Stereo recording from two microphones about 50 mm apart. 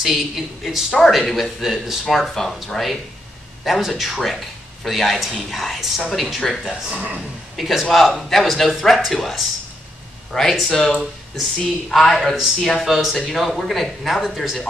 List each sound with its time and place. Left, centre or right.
0.7 s speech: centre
6.4 s speech: centre
6.9 s a man's voice: right
7.5 s speech: centre